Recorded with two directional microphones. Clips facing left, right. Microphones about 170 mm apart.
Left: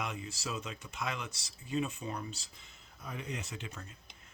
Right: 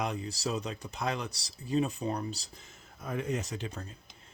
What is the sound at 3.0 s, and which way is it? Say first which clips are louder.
Speech: right 8 dB; 50° right (ahead or behind).